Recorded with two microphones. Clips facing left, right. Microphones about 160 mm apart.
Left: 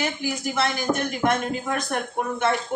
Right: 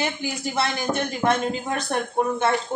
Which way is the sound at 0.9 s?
10° right (ahead or behind).